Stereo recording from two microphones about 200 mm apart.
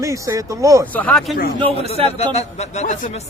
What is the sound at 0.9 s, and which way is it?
Speech, 10° left (ahead or behind).